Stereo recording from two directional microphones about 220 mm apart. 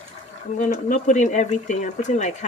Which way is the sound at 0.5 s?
35° left (ahead or behind).